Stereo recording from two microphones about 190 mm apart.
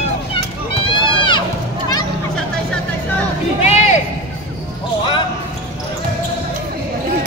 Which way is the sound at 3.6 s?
35° left (ahead or behind).